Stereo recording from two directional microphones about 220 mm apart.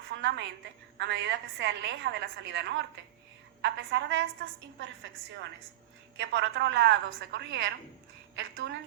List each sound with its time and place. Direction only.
0.1 s a sound: 55° right (ahead or behind)
0.9 s a woman's voice: 55° right (ahead or behind)
6.1 s a woman's voice: 55° right (ahead or behind)